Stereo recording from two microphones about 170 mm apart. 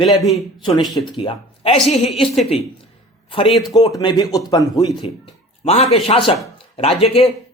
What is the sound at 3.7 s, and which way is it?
Speech, 20° left (ahead or behind).